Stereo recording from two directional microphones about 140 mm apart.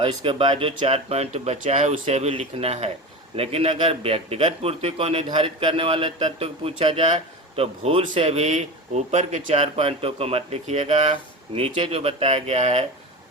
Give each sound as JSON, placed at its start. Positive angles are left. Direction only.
{"t": 0.0, "sound": "a man's voice", "side_deg": -35}
{"t": 11.1, "sound": "a man's voice", "side_deg": -40}